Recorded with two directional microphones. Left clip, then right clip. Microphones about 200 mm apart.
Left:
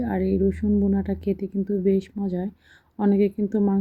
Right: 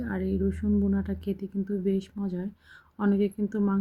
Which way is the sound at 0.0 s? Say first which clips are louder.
Left 7 dB; 10° left (ahead or behind).